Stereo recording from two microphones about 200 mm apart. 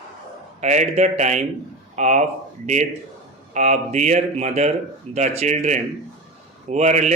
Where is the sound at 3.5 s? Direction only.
35° right (ahead or behind).